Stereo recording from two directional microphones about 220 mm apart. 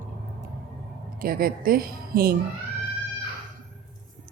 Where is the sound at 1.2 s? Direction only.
40° right (ahead or behind).